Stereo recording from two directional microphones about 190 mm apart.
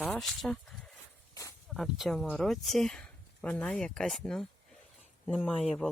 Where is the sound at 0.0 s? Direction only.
5° left (ahead or behind).